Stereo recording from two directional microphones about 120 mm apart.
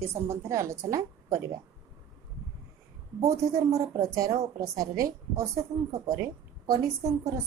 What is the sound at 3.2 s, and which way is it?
A woman's voice, 25° right (ahead or behind).